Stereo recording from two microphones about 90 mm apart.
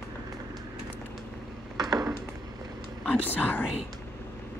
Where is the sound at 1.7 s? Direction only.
45° right (ahead or behind).